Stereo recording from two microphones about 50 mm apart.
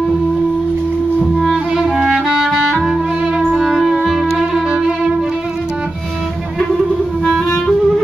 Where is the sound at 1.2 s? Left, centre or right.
Centre.